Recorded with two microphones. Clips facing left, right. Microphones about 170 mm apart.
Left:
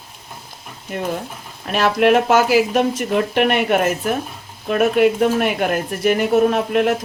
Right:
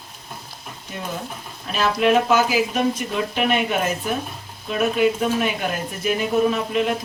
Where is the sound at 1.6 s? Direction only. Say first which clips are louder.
Left 4 dB; 65° left (ahead or behind).